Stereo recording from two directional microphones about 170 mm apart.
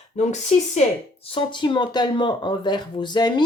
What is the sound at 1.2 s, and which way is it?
Speech, 30° left (ahead or behind).